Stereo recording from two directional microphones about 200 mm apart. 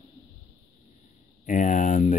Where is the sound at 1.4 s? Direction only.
40° left (ahead or behind).